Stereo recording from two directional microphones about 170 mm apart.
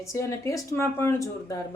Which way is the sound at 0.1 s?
15° left (ahead or behind).